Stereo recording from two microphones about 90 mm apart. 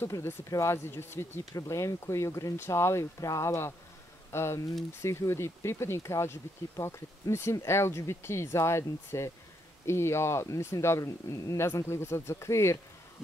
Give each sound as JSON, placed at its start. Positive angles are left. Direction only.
{"t": 0.0, "sound": "speech", "side_deg": 25}
{"t": 1.4, "sound": "speech", "side_deg": 35}